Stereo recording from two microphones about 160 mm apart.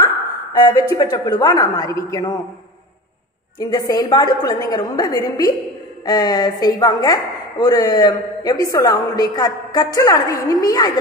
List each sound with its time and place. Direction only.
0.6 s a woman's voice: 25° left (ahead or behind)
3.5 s a woman's voice: 25° left (ahead or behind)